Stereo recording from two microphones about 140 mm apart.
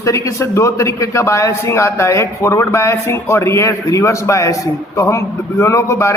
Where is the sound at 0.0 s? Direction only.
20° left (ahead or behind).